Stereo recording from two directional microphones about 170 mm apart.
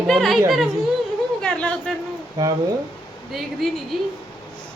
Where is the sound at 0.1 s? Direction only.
Centre (ahead or behind).